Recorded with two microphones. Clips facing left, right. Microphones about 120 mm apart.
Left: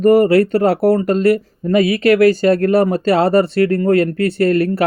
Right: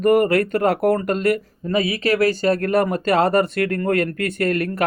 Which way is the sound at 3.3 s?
30° left (ahead or behind).